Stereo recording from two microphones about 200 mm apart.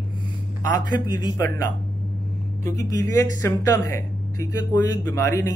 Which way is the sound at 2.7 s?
15° left (ahead or behind).